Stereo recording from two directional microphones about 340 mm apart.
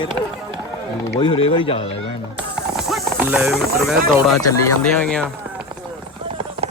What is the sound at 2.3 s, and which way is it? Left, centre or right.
Speech, centre.